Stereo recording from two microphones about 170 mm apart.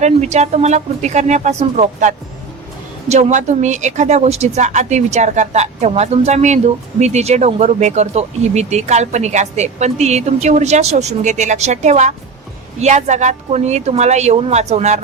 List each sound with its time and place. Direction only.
0.0 s a woman's voice: 40° right (ahead or behind)